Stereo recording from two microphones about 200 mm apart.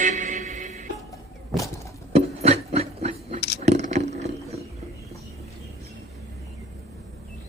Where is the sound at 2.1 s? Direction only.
30° right (ahead or behind).